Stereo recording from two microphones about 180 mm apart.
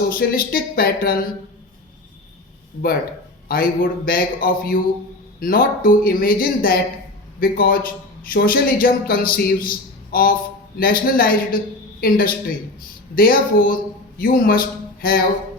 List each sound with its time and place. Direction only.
0.1 s a man's voice: 55° left (ahead or behind)
3.5 s a man's voice: 55° left (ahead or behind)